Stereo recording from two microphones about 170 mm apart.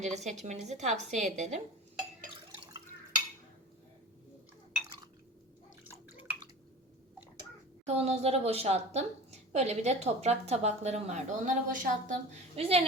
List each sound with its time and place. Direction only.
0.0 s a woman's voice: 40° right (ahead or behind)
7.9 s a woman's voice: 40° right (ahead or behind)
12.5 s a woman's voice: 35° right (ahead or behind)